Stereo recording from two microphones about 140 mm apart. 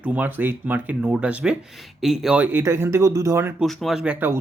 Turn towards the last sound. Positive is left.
turn(degrees=-5)  # may be behind; listen again after turning